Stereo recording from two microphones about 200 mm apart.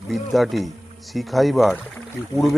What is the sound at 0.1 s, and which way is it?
Speech, centre (ahead or behind).